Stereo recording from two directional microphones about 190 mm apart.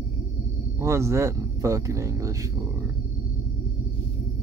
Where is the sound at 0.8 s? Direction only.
15° right (ahead or behind).